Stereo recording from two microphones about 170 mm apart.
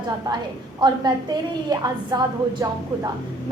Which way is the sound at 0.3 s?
20° right (ahead or behind).